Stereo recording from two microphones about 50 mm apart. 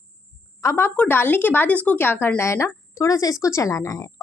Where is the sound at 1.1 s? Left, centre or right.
Left.